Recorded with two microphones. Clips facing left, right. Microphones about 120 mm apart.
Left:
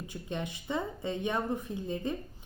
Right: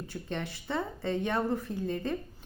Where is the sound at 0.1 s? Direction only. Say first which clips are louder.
Even; 15° left (ahead or behind).